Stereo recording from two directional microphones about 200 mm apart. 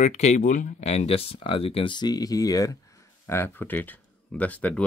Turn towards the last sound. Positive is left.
turn(degrees=5)  # may be behind; listen again after turning